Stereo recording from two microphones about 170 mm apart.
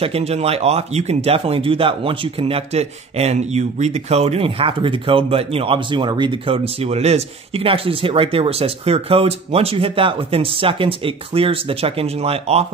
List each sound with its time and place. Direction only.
0.0 s speech: 35° right (ahead or behind)